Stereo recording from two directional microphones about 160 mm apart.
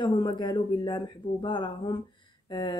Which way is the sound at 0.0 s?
25° left (ahead or behind).